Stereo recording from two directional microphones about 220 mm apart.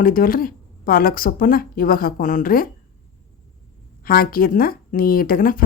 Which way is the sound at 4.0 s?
40° left (ahead or behind).